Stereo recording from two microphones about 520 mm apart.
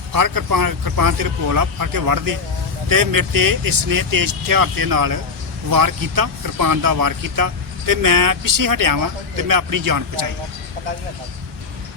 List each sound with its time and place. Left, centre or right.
0.1 s speech: right